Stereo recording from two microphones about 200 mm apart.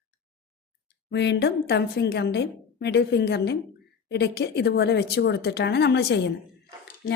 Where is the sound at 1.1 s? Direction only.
60° left (ahead or behind).